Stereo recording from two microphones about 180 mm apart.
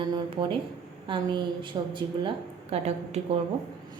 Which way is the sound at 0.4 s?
30° right (ahead or behind).